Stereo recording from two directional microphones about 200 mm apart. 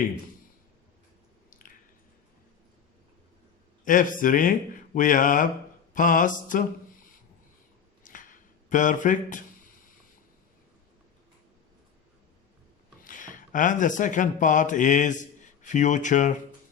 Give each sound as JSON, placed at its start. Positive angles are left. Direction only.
{"t": 1.5, "sound": "squish", "side_deg": 40}
{"t": 3.8, "sound": "speech", "side_deg": 40}
{"t": 8.0, "sound": "a sound", "side_deg": 40}
{"t": 13.1, "sound": "speech", "side_deg": 40}